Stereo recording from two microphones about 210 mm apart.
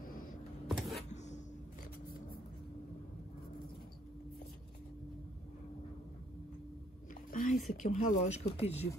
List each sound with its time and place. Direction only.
0.0 s vehicle: 40° left (ahead or behind)
0.7 s a sound: centre (ahead or behind)
7.2 s speech: 40° left (ahead or behind)